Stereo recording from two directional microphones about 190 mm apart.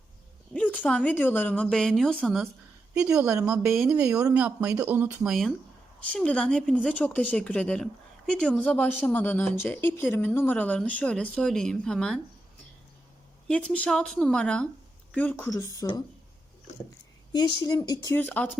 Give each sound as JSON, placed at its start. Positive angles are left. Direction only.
{"t": 0.5, "sound": "a woman's voice", "side_deg": 5}
{"t": 13.5, "sound": "a woman's voice", "side_deg": 5}
{"t": 17.3, "sound": "speech", "side_deg": 20}